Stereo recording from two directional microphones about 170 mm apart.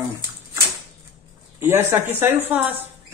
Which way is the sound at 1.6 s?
15° right (ahead or behind).